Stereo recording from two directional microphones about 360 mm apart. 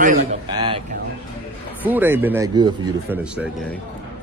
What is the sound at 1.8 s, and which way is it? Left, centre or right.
Speech, centre.